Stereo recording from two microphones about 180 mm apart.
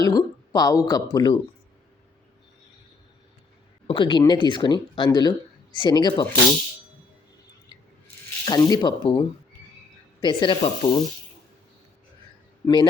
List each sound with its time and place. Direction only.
0.0 s speech: 20° left (ahead or behind)
3.8 s speech: 30° left (ahead or behind)
8.4 s speech: 20° left (ahead or behind)
12.6 s speech: 25° left (ahead or behind)